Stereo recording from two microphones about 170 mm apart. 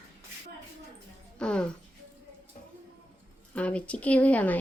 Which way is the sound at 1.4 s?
5° left (ahead or behind).